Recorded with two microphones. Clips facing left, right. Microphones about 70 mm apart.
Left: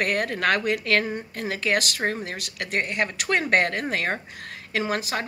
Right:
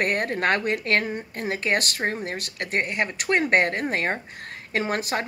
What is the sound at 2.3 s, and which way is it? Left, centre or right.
Speech, right.